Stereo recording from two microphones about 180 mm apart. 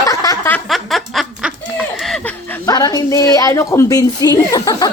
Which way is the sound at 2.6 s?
20° left (ahead or behind).